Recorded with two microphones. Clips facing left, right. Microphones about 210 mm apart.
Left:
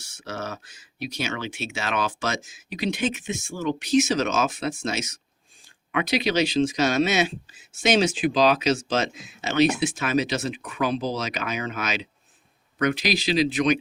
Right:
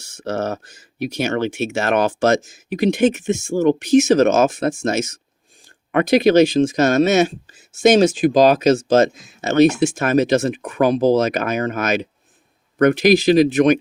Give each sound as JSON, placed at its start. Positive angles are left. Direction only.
{"t": 0.2, "sound": "speech", "side_deg": -55}